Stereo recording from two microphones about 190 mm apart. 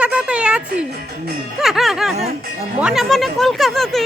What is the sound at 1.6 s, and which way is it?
Music, centre (ahead or behind).